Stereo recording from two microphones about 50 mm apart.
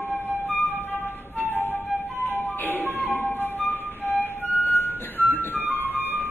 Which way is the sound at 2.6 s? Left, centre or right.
Left.